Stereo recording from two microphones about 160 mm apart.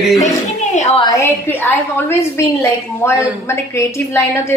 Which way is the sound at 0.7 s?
45° left (ahead or behind).